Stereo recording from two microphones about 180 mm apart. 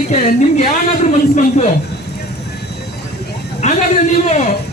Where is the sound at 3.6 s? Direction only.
40° left (ahead or behind).